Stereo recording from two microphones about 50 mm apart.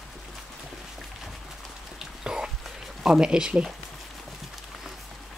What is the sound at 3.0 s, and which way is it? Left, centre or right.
Speech, centre.